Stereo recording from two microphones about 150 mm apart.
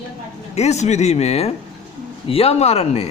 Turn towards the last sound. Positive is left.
turn(degrees=45)  # may be behind; listen again after turning